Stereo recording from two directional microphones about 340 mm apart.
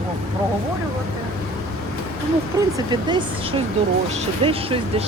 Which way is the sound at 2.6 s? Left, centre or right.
Centre.